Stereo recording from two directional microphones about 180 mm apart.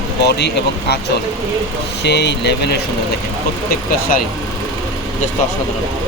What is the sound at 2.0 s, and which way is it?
Speech, 70° left (ahead or behind).